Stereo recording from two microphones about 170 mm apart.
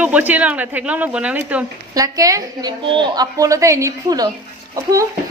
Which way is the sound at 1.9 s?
20° right (ahead or behind).